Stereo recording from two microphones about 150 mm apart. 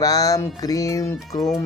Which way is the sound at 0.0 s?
25° left (ahead or behind).